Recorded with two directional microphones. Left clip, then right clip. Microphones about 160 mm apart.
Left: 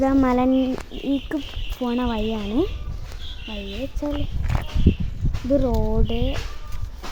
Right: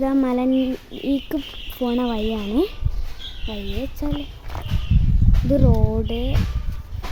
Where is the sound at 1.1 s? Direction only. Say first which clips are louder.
Right 2 dB; 25° right (ahead or behind).